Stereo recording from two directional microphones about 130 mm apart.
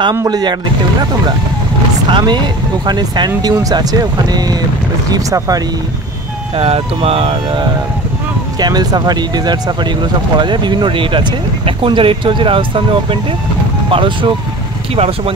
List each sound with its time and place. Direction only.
0.1 s speech: 30° right (ahead or behind)
2.0 s speech: 40° right (ahead or behind)
6.5 s speech: 45° right (ahead or behind)
8.5 s speech: 30° right (ahead or behind)